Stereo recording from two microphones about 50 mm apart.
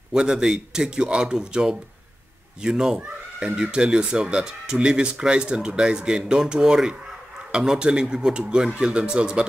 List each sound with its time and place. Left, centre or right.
0.1 s speech: centre